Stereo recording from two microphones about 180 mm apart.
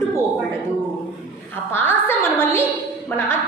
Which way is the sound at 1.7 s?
10° left (ahead or behind).